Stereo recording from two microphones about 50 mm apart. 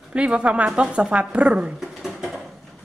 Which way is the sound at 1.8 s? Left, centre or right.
Centre.